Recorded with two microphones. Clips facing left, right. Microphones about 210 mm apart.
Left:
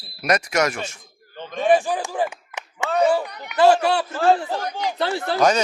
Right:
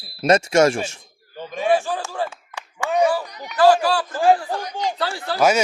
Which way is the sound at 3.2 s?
60° left (ahead or behind).